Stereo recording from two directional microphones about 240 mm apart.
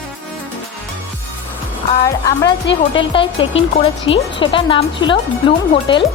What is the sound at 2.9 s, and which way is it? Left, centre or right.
Speech, left.